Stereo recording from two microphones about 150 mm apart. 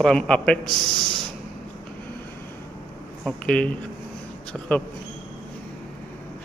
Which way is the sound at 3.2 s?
5° left (ahead or behind).